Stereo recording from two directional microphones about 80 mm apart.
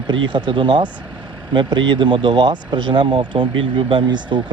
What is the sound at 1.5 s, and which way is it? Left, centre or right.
Speech, right.